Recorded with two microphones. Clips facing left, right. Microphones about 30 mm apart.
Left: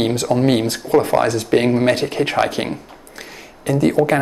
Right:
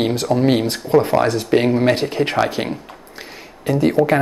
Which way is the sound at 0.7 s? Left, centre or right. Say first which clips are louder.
Even; centre.